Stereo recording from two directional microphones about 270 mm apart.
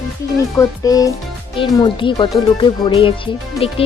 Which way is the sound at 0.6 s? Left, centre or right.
Centre.